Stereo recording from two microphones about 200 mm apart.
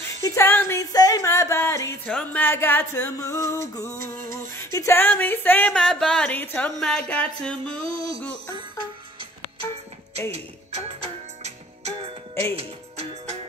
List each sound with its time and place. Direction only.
0.0 s music: 15° left (ahead or behind)
4.0 s a sound: 45° right (ahead or behind)
4.7 s music: 10° left (ahead or behind)
10.3 s music: 30° right (ahead or behind)